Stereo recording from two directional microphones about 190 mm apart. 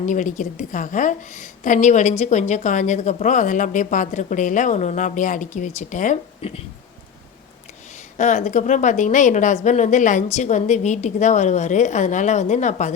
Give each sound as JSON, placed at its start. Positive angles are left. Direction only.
{"t": 0.0, "sound": "a woman's voice", "side_deg": 40}
{"t": 8.2, "sound": "a woman's voice", "side_deg": 40}